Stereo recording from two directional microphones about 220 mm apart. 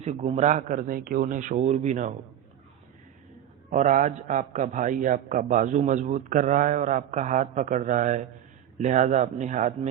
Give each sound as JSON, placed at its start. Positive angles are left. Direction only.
{"t": 0.0, "sound": "a man's voice", "side_deg": -30}
{"t": 3.7, "sound": "a man's voice", "side_deg": -35}